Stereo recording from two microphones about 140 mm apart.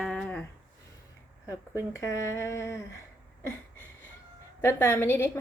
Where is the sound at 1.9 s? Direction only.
20° left (ahead or behind).